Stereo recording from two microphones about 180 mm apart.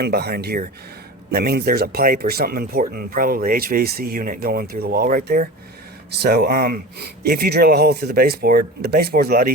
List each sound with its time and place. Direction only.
0.0 s speech: 60° right (ahead or behind)